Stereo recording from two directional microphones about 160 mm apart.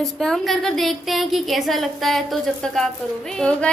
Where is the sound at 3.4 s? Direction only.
5° left (ahead or behind).